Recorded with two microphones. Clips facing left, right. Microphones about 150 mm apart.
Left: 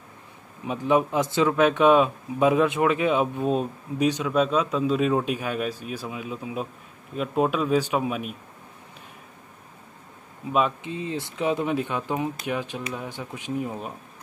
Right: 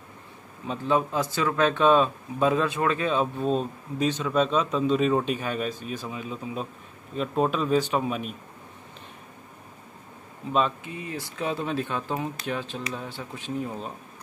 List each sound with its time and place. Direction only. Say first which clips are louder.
0.7 s speech: left 3 dB; 15° left (ahead or behind)
10.8 s speech: left 5 dB; 25° left (ahead or behind)